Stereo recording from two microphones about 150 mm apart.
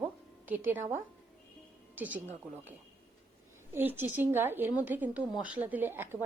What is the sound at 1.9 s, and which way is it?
Speech, 10° right (ahead or behind).